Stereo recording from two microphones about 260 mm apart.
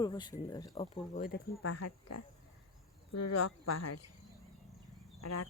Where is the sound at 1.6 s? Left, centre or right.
Left.